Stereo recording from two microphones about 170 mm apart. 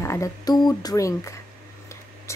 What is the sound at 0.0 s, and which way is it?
A woman's voice, 15° left (ahead or behind).